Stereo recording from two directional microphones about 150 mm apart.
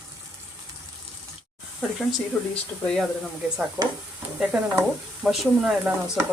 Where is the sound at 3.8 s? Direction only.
10° right (ahead or behind).